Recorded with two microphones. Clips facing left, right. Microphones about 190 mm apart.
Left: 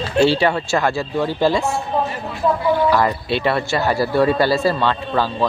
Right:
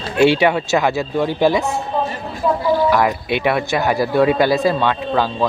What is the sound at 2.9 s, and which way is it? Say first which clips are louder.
Speech: right 1 dB; 15° right (ahead or behind).